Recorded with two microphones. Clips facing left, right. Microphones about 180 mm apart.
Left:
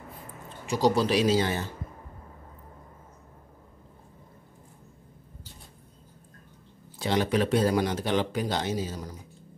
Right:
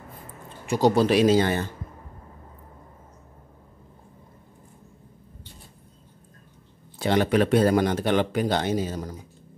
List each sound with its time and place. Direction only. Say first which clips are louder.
0.7 s speech: right 4 dB; 55° right (ahead or behind)
7.0 s speech: right 4 dB; 55° right (ahead or behind)